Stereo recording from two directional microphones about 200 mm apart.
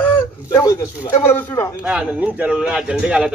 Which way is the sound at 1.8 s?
5° right (ahead or behind).